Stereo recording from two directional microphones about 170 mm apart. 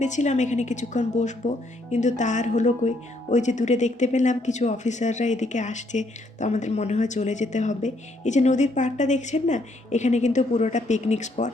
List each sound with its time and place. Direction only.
0.0 s speech: 45° left (ahead or behind)